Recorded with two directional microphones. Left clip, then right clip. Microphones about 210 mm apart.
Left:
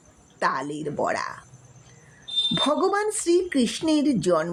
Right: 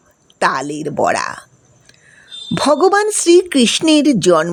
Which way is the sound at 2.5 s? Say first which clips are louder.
Right 13 dB; 40° right (ahead or behind).